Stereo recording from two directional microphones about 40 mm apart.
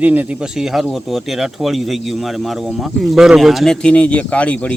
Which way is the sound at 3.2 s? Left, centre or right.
Centre.